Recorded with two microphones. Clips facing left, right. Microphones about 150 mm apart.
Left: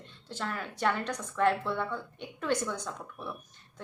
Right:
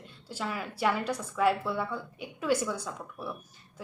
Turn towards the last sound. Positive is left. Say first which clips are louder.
# right 1 dB
turn(degrees=-5)  # may be behind; listen again after turning